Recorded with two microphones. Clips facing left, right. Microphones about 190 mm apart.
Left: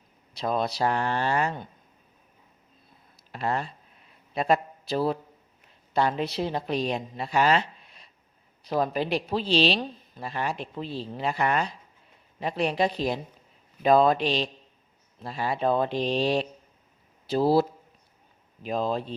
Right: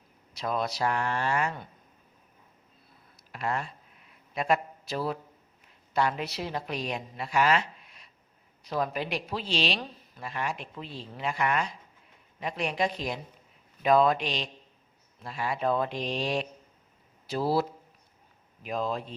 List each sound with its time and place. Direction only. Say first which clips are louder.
0.3 s speech: left 3 dB; 30° left (ahead or behind)
3.3 s a woman's voice: left 3 dB; 35° left (ahead or behind)